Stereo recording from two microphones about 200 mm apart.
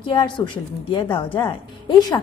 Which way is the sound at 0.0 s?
25° left (ahead or behind).